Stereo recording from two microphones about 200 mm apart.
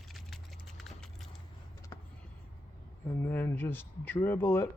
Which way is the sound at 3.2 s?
10° left (ahead or behind).